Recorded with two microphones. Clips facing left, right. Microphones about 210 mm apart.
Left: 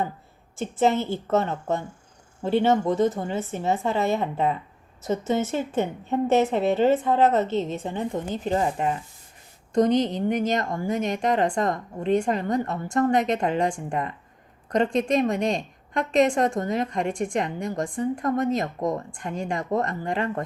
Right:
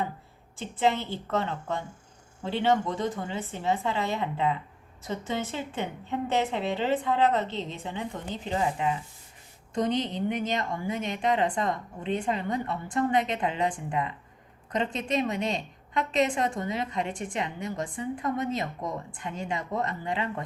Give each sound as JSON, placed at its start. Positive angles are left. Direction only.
{"t": 0.6, "sound": "a woman's voice", "side_deg": 45}